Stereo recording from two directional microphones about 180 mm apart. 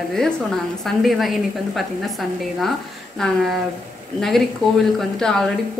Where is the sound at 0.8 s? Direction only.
Centre (ahead or behind).